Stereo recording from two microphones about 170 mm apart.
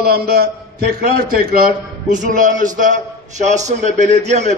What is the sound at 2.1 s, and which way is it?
A man's voice, 50° right (ahead or behind).